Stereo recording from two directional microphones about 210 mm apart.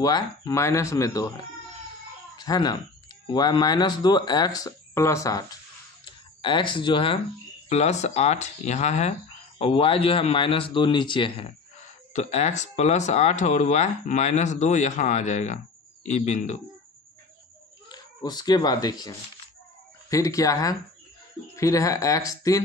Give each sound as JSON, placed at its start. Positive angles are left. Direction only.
{"t": 0.0, "sound": "speech", "side_deg": 20}
{"t": 17.8, "sound": "speech", "side_deg": 20}